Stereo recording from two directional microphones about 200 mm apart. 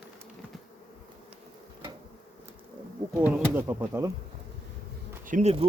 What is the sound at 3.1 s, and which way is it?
Speech, 10° right (ahead or behind).